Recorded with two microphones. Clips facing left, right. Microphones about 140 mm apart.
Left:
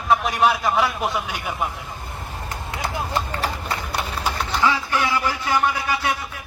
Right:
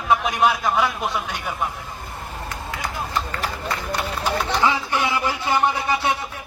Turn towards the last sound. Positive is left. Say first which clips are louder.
# right 2 dB
turn(degrees=-25)  # may be behind; listen again after turning